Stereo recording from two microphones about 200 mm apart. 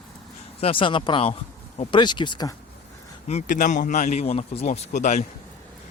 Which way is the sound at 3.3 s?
40° left (ahead or behind).